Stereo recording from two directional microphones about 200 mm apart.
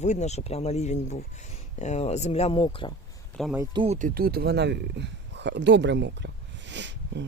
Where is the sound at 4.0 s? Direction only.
45° right (ahead or behind); by 7.3 s 65° right (ahead or behind).